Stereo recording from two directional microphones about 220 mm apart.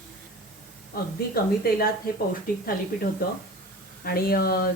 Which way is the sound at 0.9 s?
45° left (ahead or behind).